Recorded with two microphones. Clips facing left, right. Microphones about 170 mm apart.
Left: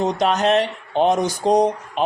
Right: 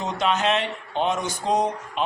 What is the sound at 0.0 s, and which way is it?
Speech, 40° left (ahead or behind).